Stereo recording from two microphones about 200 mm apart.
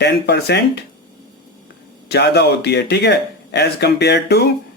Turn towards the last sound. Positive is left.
turn(degrees=55)  # may be behind; listen again after turning